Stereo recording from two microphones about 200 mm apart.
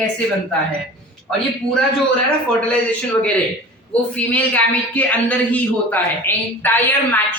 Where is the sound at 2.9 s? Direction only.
5° left (ahead or behind).